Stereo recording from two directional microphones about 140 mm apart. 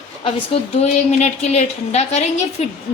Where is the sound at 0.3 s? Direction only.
45° left (ahead or behind).